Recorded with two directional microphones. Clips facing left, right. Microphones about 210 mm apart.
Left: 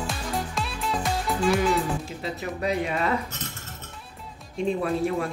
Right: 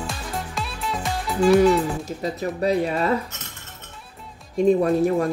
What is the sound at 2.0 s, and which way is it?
Speech, 40° right (ahead or behind).